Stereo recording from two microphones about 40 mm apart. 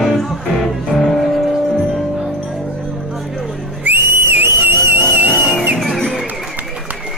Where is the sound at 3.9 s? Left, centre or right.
Right.